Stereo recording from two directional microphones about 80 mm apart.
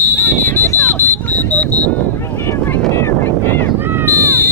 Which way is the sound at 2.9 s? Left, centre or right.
Left.